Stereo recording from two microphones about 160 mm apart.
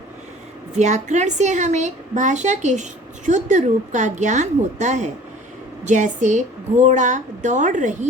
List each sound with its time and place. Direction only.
0.8 s a woman's voice: 45° right (ahead or behind)